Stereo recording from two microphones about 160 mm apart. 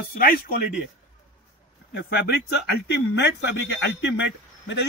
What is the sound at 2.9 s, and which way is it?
Speech, 90° left.